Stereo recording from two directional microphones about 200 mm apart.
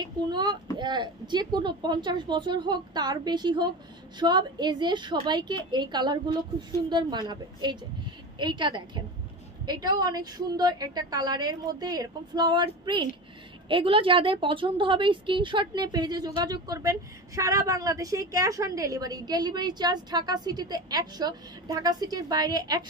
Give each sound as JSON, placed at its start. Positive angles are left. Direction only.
{"t": 0.0, "sound": "a woman's voice", "side_deg": -20}